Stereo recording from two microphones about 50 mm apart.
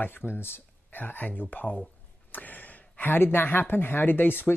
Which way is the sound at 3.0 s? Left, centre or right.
Left.